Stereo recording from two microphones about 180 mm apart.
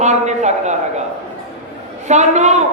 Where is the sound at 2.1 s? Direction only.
40° right (ahead or behind).